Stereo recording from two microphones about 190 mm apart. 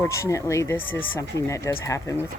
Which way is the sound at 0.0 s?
15° left (ahead or behind).